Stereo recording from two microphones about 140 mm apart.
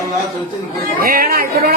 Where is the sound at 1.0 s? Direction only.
90° right.